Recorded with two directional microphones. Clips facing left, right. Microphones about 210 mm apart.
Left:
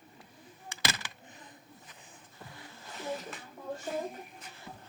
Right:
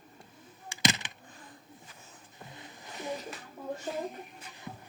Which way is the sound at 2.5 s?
20° right (ahead or behind).